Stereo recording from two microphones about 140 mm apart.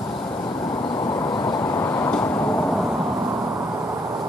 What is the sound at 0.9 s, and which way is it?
Vehicle, 30° left (ahead or behind).